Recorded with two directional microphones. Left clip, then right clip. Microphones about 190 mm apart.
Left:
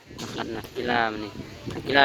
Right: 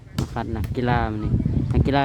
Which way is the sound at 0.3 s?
5° right (ahead or behind).